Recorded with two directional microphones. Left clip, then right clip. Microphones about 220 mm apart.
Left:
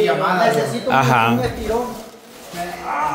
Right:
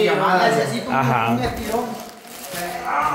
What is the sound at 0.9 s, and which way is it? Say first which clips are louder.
Speech: left 6 dB; 25° left (ahead or behind).